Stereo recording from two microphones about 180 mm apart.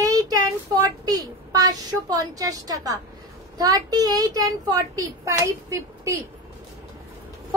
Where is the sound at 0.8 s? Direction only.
20° right (ahead or behind).